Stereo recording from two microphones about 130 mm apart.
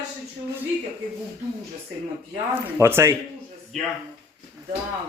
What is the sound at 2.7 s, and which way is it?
Speech, 20° right (ahead or behind).